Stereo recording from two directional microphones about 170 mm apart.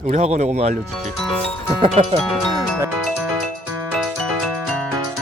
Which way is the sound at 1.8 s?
35° right (ahead or behind).